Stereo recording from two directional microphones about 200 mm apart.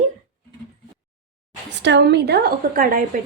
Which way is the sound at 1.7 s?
60° right (ahead or behind).